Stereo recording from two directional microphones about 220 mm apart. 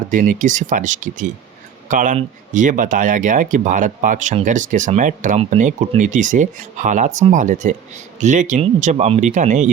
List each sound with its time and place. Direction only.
0.1 s speech: 35° right (ahead or behind)